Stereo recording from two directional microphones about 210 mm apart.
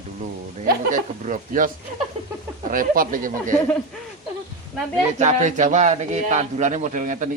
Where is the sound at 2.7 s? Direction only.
40° right (ahead or behind).